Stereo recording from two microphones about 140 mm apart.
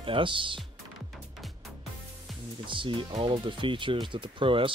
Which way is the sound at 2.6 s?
35° right (ahead or behind).